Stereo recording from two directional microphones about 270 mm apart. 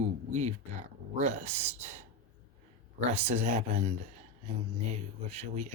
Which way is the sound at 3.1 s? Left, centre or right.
Right.